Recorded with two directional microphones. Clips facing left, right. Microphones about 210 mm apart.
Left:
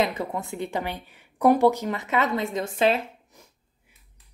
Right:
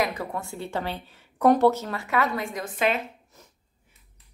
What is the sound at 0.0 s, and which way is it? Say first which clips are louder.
A woman's voice: left 2 dB; 20° left (ahead or behind).